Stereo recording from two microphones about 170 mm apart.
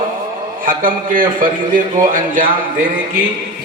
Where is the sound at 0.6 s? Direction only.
55° right (ahead or behind).